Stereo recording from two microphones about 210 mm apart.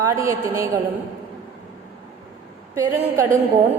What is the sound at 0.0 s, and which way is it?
Speech, 15° right (ahead or behind).